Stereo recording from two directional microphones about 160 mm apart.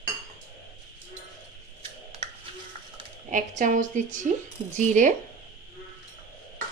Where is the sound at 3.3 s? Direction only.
50° right (ahead or behind).